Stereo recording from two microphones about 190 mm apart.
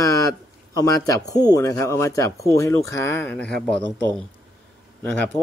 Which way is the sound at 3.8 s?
75° right (ahead or behind).